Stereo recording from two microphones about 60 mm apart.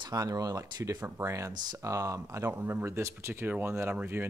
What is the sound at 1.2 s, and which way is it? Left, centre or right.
Speech, right.